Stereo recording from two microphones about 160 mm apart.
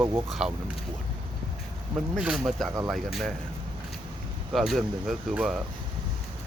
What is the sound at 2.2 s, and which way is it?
Speech, 5° right (ahead or behind).